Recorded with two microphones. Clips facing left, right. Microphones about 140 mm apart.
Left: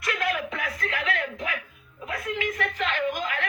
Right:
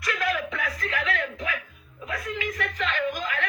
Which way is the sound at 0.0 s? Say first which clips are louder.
Even; 25° left (ahead or behind).